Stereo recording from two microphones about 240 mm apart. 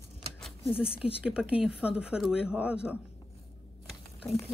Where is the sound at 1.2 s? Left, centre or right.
Centre.